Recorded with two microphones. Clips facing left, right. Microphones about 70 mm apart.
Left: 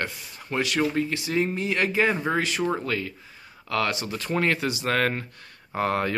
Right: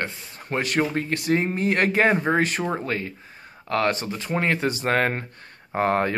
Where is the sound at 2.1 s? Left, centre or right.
Right.